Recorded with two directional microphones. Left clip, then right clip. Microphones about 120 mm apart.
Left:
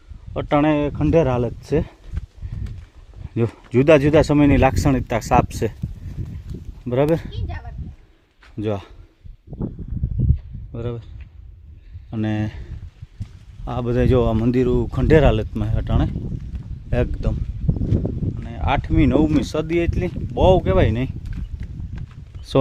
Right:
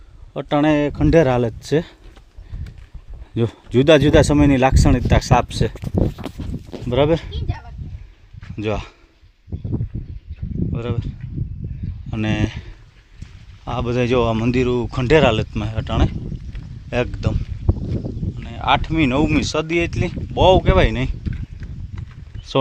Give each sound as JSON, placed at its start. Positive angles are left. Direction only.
{"t": 0.3, "sound": "speech", "side_deg": 5}
{"t": 0.6, "sound": "speech", "side_deg": -10}
{"t": 3.3, "sound": "speech", "side_deg": -5}
{"t": 6.8, "sound": "speech", "side_deg": 10}
{"t": 8.5, "sound": "speech", "side_deg": 25}
{"t": 10.7, "sound": "speech", "side_deg": 5}
{"t": 12.1, "sound": "speech", "side_deg": 20}
{"t": 13.7, "sound": "speech", "side_deg": 35}
{"t": 16.9, "sound": "speech", "side_deg": 5}
{"t": 18.4, "sound": "speech", "side_deg": 20}
{"t": 22.5, "sound": "a sound", "side_deg": 90}